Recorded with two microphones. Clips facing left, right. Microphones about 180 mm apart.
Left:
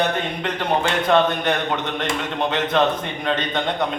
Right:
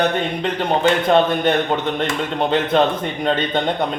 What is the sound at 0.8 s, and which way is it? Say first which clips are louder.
A man's voice: right 3 dB; 30° right (ahead or behind).